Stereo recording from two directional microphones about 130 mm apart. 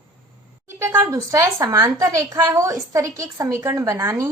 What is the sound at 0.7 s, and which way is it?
A woman's voice, 20° right (ahead or behind).